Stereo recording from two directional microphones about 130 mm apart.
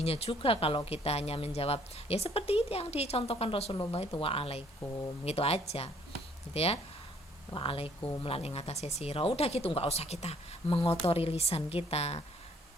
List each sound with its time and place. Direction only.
0.0 s speech: 50° left (ahead or behind)